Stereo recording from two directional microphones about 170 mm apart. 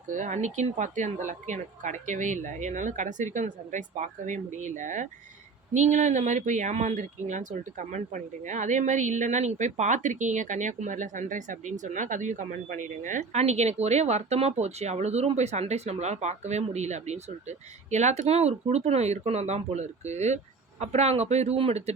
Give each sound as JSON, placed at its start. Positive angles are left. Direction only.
{"t": 0.1, "sound": "speech", "side_deg": -45}